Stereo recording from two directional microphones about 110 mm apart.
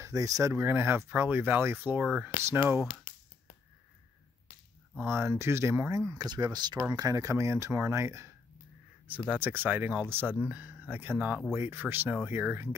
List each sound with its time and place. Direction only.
0.0 s speech: 30° right (ahead or behind)
5.0 s speech: 25° right (ahead or behind)
9.3 s speech: 15° right (ahead or behind)